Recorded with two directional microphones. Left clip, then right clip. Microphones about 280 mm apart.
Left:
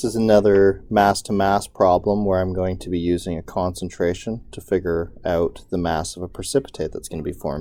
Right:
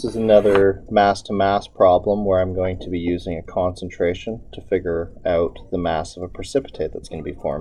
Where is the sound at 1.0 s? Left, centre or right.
Left.